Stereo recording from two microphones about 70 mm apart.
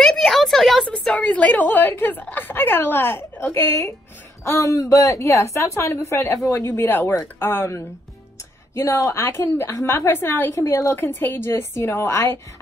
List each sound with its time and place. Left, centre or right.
0.0 s a sound: centre
0.8 s a woman's voice: centre; by 3.9 s left
4.5 s a woman's voice: left
6.7 s a woman's voice: left
8.7 s a woman's voice: left
10.5 s a woman's voice: left